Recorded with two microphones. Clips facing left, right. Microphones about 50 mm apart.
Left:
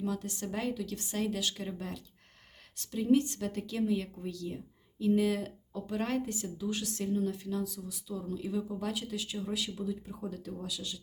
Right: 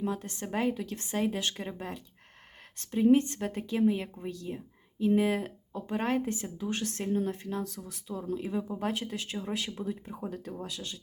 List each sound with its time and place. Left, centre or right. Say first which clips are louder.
0.0 s speech: right 1 dB; right